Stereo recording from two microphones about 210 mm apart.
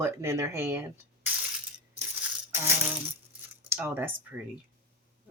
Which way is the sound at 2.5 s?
10° right (ahead or behind).